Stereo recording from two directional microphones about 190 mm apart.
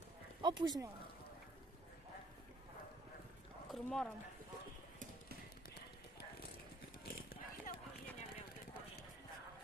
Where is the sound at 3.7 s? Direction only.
5° left (ahead or behind).